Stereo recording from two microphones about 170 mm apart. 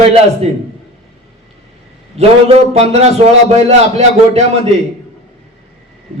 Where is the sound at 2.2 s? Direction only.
40° right (ahead or behind).